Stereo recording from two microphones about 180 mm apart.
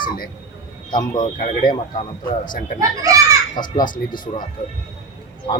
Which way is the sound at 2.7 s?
20° right (ahead or behind).